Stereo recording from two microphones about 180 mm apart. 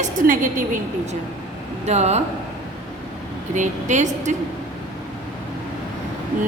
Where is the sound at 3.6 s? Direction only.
40° right (ahead or behind).